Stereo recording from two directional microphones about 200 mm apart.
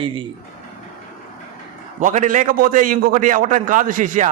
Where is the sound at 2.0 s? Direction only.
40° right (ahead or behind).